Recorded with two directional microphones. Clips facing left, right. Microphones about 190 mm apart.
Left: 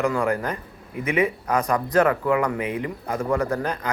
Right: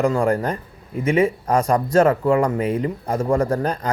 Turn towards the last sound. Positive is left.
turn(degrees=-35)  # may be behind; listen again after turning